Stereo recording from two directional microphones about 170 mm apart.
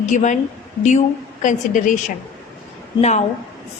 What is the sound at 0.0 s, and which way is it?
A woman's voice, 45° left (ahead or behind).